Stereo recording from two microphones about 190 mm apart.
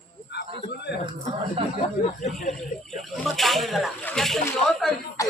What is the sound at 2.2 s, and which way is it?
Speech, 40° left (ahead or behind).